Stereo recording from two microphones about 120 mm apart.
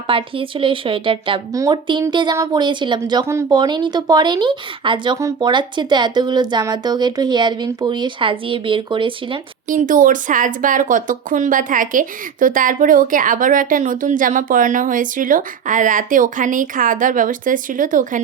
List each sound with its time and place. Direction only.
0.1 s a woman's voice: 45° right (ahead or behind)
1.5 s speech: 30° right (ahead or behind)
1.9 s speech: 40° right (ahead or behind)
9.6 s speech: 90° right